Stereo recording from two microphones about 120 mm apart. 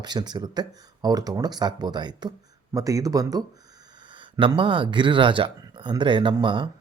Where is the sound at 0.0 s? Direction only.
35° right (ahead or behind).